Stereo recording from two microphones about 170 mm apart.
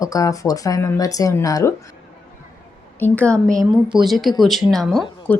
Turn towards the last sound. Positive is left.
turn(degrees=10)  # may be behind; listen again after turning